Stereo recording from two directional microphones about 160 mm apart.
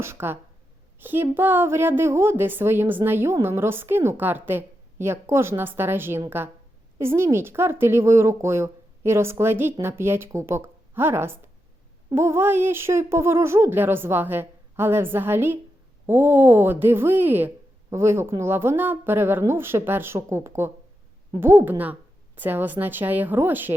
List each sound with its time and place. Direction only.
0.0 s a woman's voice: 15° right (ahead or behind)